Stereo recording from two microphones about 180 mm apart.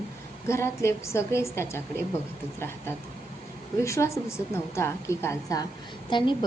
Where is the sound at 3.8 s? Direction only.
15° left (ahead or behind).